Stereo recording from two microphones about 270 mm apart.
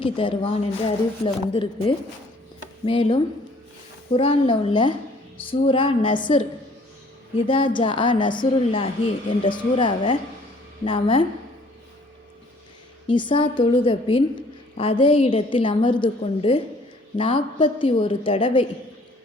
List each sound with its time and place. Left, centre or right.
0.0 s a woman's voice: centre
7.4 s a woman's voice: centre
13.1 s a woman's voice: centre